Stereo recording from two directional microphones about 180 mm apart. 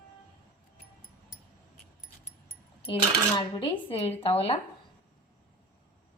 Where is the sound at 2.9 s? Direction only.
30° left (ahead or behind).